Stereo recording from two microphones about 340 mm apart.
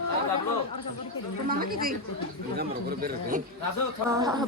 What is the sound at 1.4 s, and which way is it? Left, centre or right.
Speech, right.